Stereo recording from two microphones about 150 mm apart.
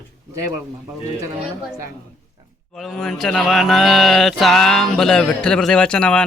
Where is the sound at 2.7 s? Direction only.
5° left (ahead or behind).